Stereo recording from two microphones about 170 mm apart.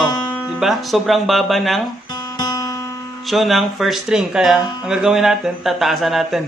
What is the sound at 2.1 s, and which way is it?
Guitar, 20° left (ahead or behind).